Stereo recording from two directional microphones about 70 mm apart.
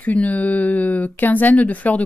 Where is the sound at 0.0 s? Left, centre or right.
Left.